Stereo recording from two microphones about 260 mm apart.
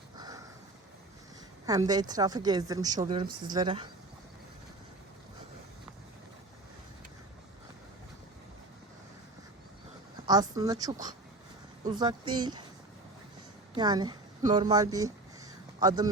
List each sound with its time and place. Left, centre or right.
0.2 s sniff: centre
1.6 s a woman's voice: centre
10.2 s a woman's voice: centre
13.7 s a woman's voice: centre